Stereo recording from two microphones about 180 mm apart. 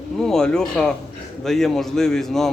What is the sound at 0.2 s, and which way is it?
Speech, 5° left (ahead or behind).